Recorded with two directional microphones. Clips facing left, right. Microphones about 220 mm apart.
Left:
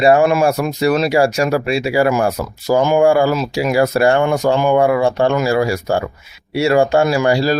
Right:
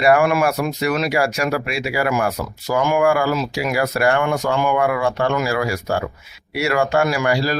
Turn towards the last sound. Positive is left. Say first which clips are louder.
# left 5 dB
turn(degrees=30)  # may be behind; listen again after turning